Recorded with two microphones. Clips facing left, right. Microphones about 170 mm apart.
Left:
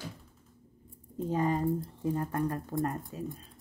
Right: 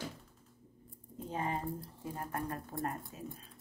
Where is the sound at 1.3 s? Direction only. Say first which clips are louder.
Left 8 dB; 40° left (ahead or behind).